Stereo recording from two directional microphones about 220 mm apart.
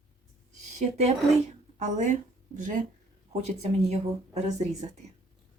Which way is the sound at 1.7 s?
35° right (ahead or behind).